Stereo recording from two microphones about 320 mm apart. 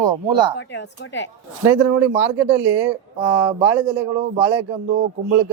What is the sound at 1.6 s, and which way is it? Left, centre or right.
Speech, centre.